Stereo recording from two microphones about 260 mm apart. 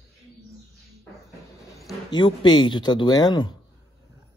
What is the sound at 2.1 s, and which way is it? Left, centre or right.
Speech, centre.